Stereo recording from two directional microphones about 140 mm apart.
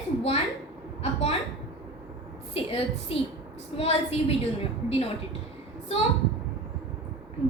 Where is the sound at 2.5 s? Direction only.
45° left (ahead or behind).